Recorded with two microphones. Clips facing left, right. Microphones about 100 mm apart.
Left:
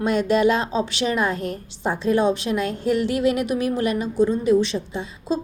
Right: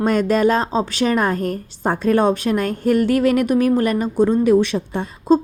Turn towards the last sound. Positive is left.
turn(degrees=-55)  # may be behind; listen again after turning